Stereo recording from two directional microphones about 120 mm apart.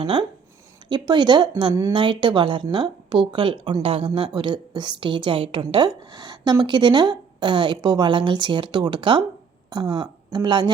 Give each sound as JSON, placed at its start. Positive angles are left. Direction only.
{"t": 0.0, "sound": "a woman's voice", "side_deg": -45}